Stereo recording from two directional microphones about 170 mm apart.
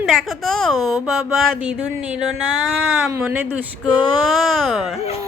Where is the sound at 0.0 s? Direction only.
Centre (ahead or behind).